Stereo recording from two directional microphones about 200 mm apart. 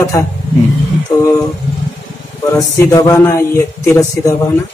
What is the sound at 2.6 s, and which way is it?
A man's voice, 15° left (ahead or behind).